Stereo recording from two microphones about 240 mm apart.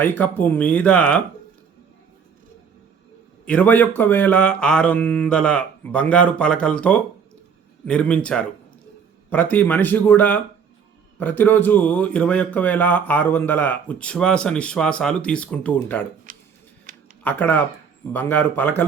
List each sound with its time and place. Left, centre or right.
0.0 s speech: centre
3.4 s speech: centre
16.3 s a sound: right
17.2 s speech: centre